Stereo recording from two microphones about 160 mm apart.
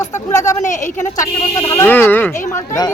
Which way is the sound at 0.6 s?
50° left (ahead or behind).